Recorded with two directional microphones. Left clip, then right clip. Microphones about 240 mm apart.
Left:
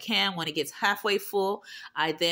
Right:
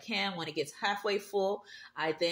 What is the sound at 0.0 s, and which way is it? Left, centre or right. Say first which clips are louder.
Speech: left 7 dB; left.